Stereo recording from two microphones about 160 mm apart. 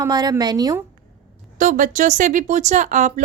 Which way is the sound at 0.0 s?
25° right (ahead or behind).